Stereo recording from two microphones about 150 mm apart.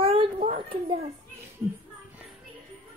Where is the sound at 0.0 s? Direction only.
40° right (ahead or behind).